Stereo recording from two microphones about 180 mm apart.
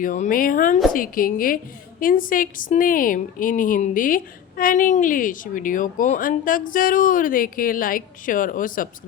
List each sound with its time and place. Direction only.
0.0 s a woman's voice: 50° left (ahead or behind)